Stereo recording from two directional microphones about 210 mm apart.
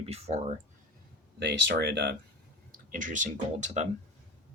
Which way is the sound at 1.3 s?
55° right (ahead or behind).